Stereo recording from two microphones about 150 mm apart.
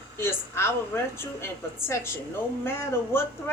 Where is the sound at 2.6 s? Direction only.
15° left (ahead or behind).